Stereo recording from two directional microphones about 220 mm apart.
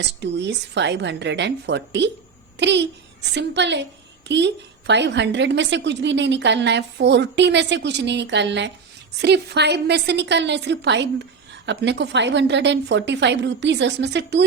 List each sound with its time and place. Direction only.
0.0 s a woman's voice: 50° right (ahead or behind)